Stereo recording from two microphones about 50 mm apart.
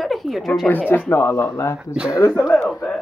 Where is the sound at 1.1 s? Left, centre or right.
Left.